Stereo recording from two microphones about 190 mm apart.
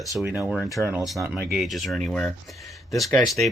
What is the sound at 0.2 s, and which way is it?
Speech, 5° right (ahead or behind).